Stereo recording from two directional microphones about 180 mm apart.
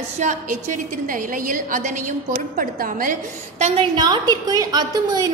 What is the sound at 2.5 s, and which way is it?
A woman's voice, 50° right (ahead or behind).